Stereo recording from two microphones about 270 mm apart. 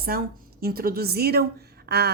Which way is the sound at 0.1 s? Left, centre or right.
Right.